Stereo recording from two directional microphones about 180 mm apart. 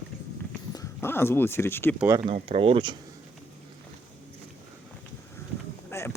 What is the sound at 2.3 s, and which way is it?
Speech, 30° right (ahead or behind).